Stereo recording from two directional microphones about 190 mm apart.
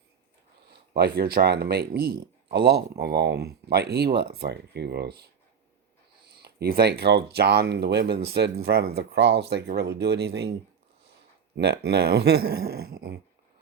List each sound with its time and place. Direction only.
0.7 s speech: 55° right (ahead or behind)
6.4 s speech: 55° right (ahead or behind)
11.5 s speech: 60° right (ahead or behind)